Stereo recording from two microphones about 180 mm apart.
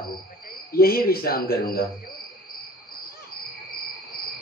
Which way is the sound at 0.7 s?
55° left (ahead or behind).